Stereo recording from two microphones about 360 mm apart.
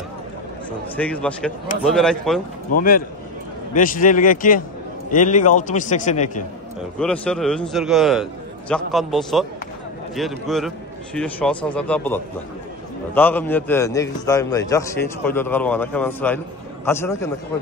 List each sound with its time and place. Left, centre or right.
0.9 s a man's voice: centre
2.7 s a man's voice: left
7.0 s a man's voice: centre